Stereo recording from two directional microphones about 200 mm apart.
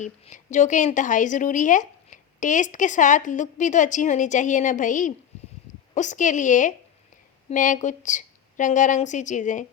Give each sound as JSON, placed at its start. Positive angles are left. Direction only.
{"t": 0.0, "sound": "speech", "side_deg": 35}